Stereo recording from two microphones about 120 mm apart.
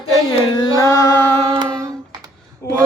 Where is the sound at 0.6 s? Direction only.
30° left (ahead or behind).